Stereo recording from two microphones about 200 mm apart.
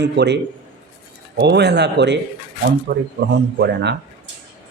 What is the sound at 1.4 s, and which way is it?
A man's voice, 60° right (ahead or behind).